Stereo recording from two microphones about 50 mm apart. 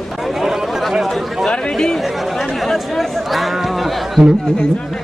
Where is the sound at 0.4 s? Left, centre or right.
Centre.